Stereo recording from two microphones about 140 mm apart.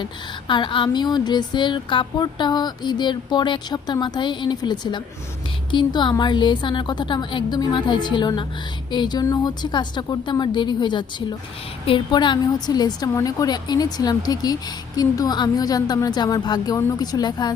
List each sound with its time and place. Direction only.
0.0 s a woman's voice: 35° left (ahead or behind)